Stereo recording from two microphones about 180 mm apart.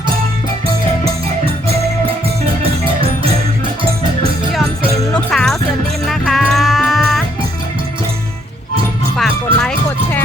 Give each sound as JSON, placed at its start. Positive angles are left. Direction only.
{"t": 2.6, "sound": "music", "side_deg": -30}
{"t": 5.1, "sound": "music", "side_deg": 5}
{"t": 9.1, "sound": "music", "side_deg": 0}